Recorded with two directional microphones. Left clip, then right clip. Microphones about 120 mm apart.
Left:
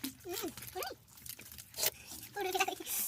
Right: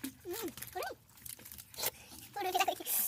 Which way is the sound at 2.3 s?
60° right (ahead or behind).